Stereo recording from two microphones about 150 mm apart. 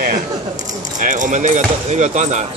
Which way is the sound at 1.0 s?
55° right (ahead or behind).